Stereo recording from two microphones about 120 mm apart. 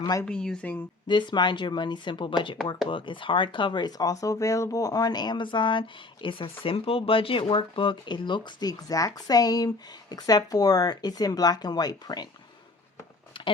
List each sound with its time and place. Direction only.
0.0 s speech: 25° left (ahead or behind)
0.3 s speech: 10° left (ahead or behind)
1.0 s speech: 40° left (ahead or behind)
13.3 s a sound: 45° left (ahead or behind)